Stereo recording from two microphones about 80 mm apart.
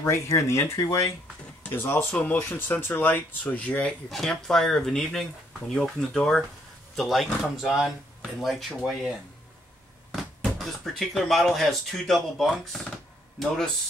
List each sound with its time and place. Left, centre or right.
0.3 s speech: left
1.6 s speech: left
4.1 s speech: centre
10.1 s speech: centre